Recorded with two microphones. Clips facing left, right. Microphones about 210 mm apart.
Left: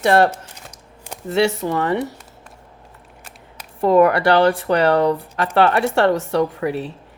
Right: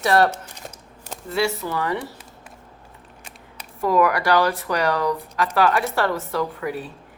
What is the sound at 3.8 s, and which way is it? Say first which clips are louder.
Speech: left 6 dB; 30° left (ahead or behind).